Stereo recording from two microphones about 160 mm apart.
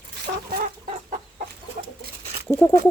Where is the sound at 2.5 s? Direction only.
15° left (ahead or behind).